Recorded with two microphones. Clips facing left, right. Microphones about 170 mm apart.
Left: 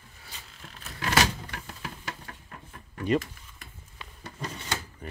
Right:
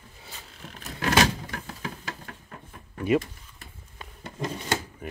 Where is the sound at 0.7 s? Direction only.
45° right (ahead or behind).